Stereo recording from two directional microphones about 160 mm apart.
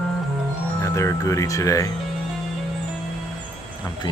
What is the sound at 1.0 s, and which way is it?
Speech, 20° left (ahead or behind).